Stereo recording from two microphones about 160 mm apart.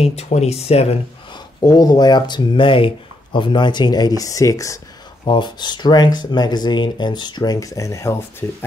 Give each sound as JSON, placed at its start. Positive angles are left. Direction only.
{"t": 0.0, "sound": "speech", "side_deg": 40}
{"t": 1.6, "sound": "speech", "side_deg": 25}